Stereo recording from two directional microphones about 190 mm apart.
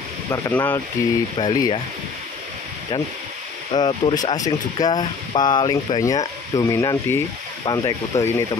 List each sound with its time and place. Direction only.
0.3 s speech: 15° left (ahead or behind)
3.7 s speech: 20° left (ahead or behind)